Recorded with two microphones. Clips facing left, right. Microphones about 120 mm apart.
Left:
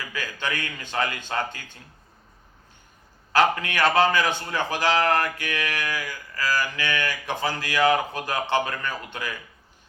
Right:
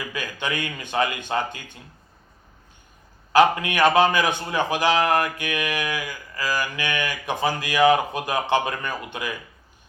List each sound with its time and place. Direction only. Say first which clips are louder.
0.1 s a man's voice: left 1 dB; 15° right (ahead or behind)
3.3 s a man's voice: right 4 dB; 15° right (ahead or behind)